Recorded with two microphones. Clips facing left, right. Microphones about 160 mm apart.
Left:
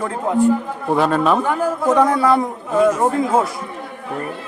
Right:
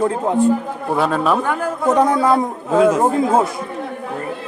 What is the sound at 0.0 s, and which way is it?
Speech, 25° right (ahead or behind).